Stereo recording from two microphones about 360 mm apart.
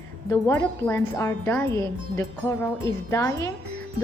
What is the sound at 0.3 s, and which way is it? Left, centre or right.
Speech, centre.